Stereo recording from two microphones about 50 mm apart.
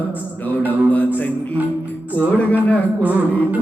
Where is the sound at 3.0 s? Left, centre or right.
Right.